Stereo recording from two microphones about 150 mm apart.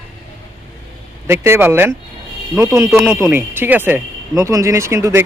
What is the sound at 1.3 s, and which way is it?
Speech, 15° right (ahead or behind).